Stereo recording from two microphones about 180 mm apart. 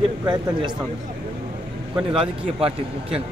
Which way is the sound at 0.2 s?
25° right (ahead or behind).